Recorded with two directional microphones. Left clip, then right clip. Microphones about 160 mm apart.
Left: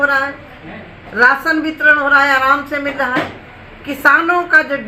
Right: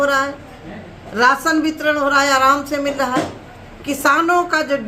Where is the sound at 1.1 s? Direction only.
40° right (ahead or behind).